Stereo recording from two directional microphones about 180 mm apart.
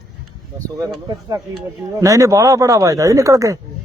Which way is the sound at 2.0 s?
15° right (ahead or behind).